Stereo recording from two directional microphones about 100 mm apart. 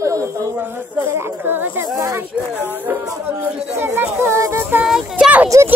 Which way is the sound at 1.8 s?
35° right (ahead or behind).